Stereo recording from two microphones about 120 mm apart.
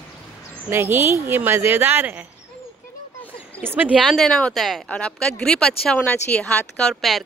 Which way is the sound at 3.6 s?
15° right (ahead or behind).